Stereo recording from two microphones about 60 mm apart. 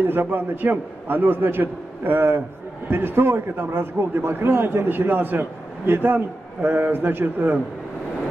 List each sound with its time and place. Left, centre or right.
0.0 s a man's voice: right